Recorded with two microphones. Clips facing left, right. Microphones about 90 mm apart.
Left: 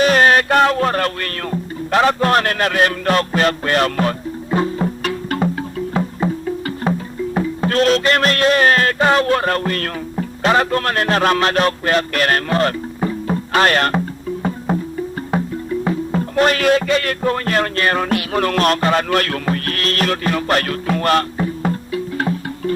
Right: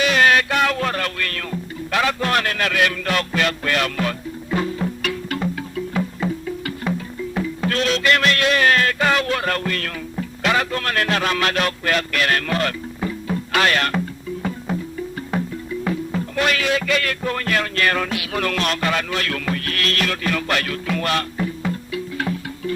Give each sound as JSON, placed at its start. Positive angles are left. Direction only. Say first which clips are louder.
{"t": 0.0, "sound": "speech", "louder": "left 4 dB", "side_deg": 40}
{"t": 4.5, "sound": "music", "louder": "left 4 dB", "side_deg": 35}
{"t": 12.5, "sound": "speech", "louder": "left 5 dB", "side_deg": 30}
{"t": 15.3, "sound": "music", "louder": "left 5 dB", "side_deg": 25}
{"t": 16.1, "sound": "speech", "louder": "left 7 dB", "side_deg": 40}
{"t": 16.8, "sound": "music", "louder": "left 4 dB", "side_deg": 35}